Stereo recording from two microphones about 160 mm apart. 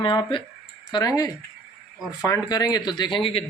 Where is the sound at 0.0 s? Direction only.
30° left (ahead or behind).